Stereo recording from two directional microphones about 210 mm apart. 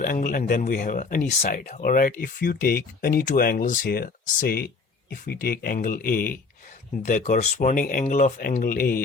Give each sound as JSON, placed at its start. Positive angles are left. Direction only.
{"t": 0.0, "sound": "speech", "side_deg": 40}